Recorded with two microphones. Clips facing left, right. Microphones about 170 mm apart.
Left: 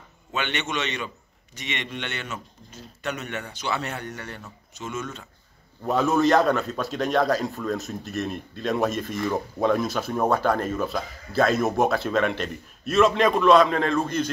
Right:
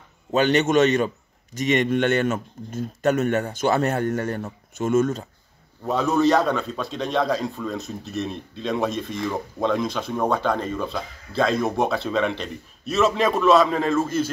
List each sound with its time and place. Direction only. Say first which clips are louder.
0.3 s a man's voice: right 11 dB; 40° right (ahead or behind)
5.9 s a man's voice: right 1 dB; centre (ahead or behind)